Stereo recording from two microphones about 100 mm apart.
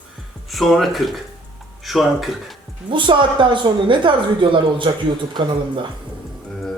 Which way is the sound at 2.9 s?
55° right (ahead or behind).